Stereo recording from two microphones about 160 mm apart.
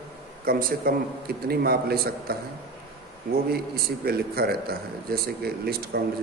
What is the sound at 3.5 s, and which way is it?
A man's voice, 75° right (ahead or behind).